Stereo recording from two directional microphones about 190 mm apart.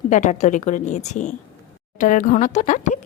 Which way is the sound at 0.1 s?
40° left (ahead or behind).